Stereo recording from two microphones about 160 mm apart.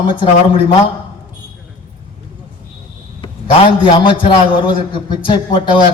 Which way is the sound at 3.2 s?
30° left (ahead or behind).